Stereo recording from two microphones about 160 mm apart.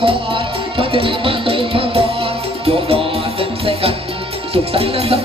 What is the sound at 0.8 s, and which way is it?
Music, 35° right (ahead or behind).